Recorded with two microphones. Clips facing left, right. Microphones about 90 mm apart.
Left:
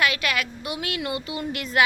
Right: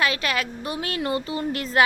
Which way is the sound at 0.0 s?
30° right (ahead or behind).